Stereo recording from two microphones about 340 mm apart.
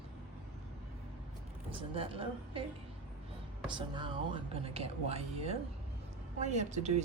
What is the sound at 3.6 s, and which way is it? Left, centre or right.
Speech, centre.